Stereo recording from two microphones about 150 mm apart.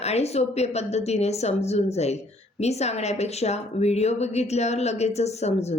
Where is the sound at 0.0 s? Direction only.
45° left (ahead or behind).